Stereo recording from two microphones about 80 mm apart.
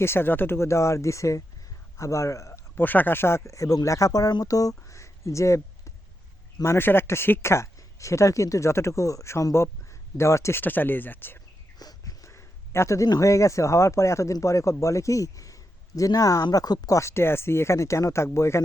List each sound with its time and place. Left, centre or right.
0.0 s a man's voice: left
2.7 s speech: left
10.6 s speech: left
11.8 s a sound: left
13.1 s speech: left